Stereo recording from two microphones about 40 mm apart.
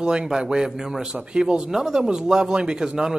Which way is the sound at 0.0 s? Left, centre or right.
Centre.